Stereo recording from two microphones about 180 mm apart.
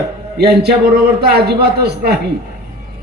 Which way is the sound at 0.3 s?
65° right (ahead or behind).